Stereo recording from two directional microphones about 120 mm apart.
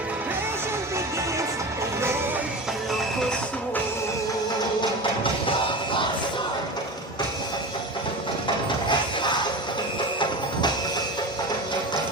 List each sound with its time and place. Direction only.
4.8 s music: 45° left (ahead or behind)
8.9 s music: 40° left (ahead or behind)